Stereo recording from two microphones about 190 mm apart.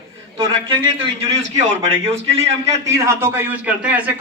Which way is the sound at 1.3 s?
40° right (ahead or behind).